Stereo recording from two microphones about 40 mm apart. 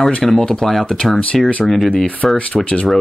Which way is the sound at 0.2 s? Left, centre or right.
Centre.